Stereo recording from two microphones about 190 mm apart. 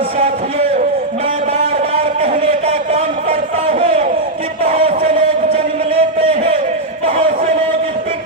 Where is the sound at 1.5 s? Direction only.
40° right (ahead or behind).